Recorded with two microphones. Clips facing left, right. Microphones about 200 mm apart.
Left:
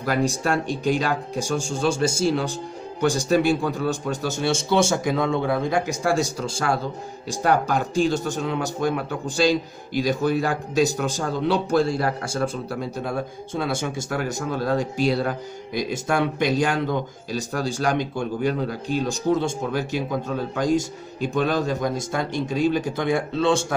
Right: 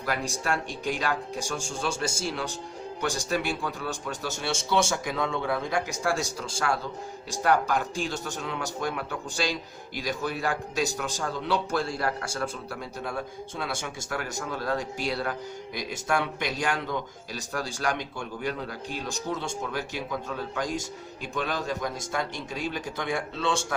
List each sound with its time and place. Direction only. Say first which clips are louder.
0.0 s a man's voice: left 8 dB; 35° left (ahead or behind)
7.4 s a man's voice: left 3 dB; 30° left (ahead or behind)